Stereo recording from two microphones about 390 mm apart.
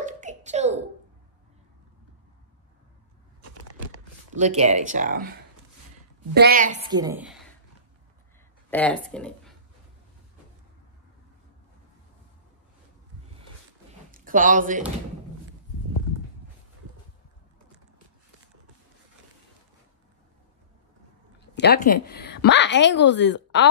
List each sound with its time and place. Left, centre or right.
0.0 s a sound: centre
4.3 s speech: centre
6.3 s a woman's voice: right; by 7.4 s centre
8.6 s speech: centre
14.1 s speech: centre
21.5 s a woman's voice: left